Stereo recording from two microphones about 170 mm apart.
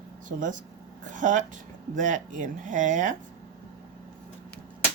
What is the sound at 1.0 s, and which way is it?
Speech, 50° right (ahead or behind).